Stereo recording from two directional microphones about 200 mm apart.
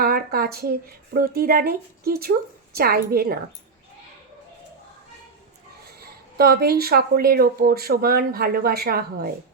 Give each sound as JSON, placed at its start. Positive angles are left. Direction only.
{"t": 0.0, "sound": "speech", "side_deg": -50}
{"t": 6.3, "sound": "speech", "side_deg": -50}